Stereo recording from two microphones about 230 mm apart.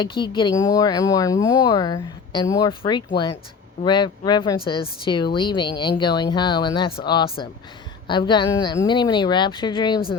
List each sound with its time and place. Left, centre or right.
0.0 s speech: left